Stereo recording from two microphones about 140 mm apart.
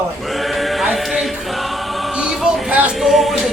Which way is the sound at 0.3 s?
Centre (ahead or behind).